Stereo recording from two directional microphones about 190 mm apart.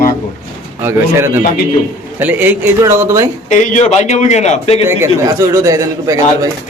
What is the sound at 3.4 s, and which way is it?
Speech, 40° left (ahead or behind).